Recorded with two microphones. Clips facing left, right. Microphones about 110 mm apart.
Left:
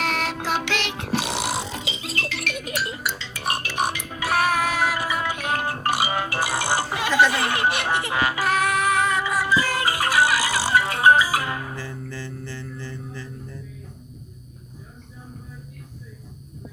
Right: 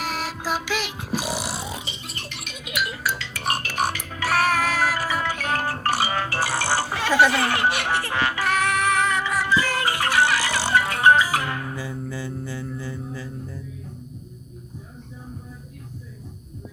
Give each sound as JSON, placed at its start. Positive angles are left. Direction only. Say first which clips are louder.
{"t": 0.0, "sound": "a sound", "louder": "left 3 dB", "side_deg": 65}
{"t": 1.8, "sound": "music", "louder": "left 6 dB", "side_deg": 90}
{"t": 2.6, "sound": "music", "louder": "right 3 dB", "side_deg": 35}
{"t": 2.9, "sound": "music", "louder": "right 2 dB", "side_deg": 25}
{"t": 10.2, "sound": "music", "louder": "even", "side_deg": -25}
{"t": 10.8, "sound": "music", "louder": "even", "side_deg": 20}
{"t": 11.8, "sound": "mantra", "louder": "right 3 dB", "side_deg": -15}
{"t": 12.7, "sound": "music", "louder": "right 3 dB", "side_deg": -10}